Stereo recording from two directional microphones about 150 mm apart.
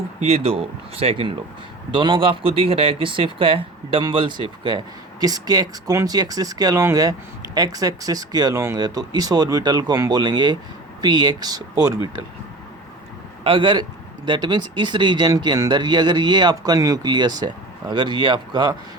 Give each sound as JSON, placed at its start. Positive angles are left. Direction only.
{"t": 0.3, "sound": "speech", "side_deg": -40}
{"t": 13.4, "sound": "a man's voice", "side_deg": -35}